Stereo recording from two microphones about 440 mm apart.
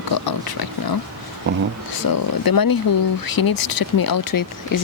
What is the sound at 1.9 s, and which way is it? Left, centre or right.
Speech, left.